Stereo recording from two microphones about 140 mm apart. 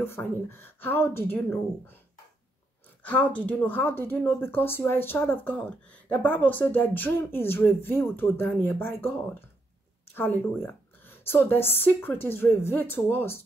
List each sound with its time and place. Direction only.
0.0 s speech: 15° left (ahead or behind)
3.0 s speech: 10° left (ahead or behind)